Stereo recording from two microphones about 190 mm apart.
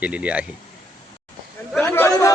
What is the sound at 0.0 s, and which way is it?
Speech, 5° right (ahead or behind).